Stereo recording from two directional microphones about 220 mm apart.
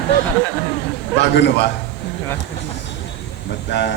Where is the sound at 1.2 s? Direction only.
50° left (ahead or behind).